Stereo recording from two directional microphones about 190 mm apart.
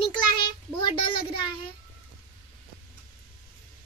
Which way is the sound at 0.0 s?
25° left (ahead or behind).